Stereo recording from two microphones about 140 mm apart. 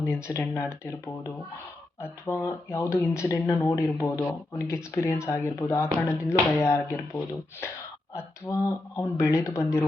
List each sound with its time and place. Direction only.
0.0 s speech: 20° left (ahead or behind)